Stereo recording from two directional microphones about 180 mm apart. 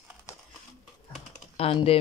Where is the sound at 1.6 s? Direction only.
30° left (ahead or behind).